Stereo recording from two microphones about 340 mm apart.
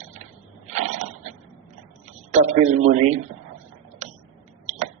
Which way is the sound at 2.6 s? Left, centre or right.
Centre.